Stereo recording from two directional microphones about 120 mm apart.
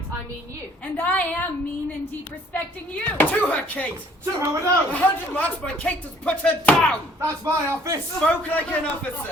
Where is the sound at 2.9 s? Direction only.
15° left (ahead or behind).